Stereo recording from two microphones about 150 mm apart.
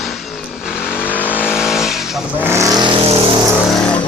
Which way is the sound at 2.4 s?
15° right (ahead or behind).